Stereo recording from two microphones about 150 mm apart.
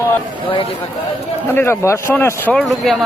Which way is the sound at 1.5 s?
15° left (ahead or behind).